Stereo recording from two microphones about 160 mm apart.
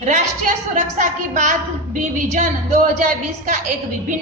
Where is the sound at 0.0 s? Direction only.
50° right (ahead or behind).